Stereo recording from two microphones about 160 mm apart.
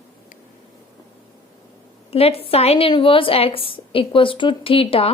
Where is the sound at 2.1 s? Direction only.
40° left (ahead or behind).